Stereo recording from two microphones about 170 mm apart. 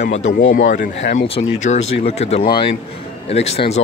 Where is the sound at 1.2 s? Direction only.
35° left (ahead or behind).